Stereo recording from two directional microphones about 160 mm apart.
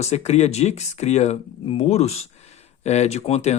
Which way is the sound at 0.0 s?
45° left (ahead or behind).